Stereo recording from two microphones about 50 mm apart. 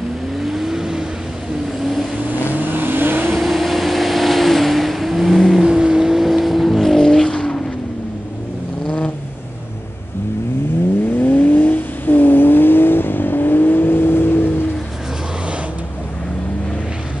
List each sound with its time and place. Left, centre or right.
0.4 s vehicle: centre
2.5 s vehicle: right
3.3 s vehicle: centre
11.1 s vehicle: left